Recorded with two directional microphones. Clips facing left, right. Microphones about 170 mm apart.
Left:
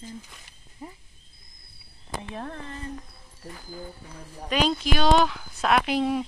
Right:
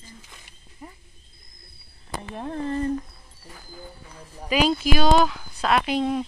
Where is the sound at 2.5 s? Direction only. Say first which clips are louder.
Right 10 dB; 35° right (ahead or behind).